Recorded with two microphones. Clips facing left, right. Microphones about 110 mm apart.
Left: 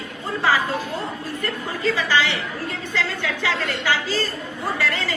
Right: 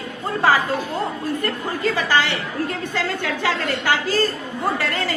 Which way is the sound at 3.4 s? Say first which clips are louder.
Right 2 dB; 50° right (ahead or behind).